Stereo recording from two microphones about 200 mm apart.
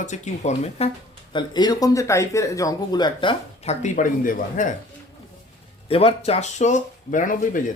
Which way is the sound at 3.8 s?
40° left (ahead or behind).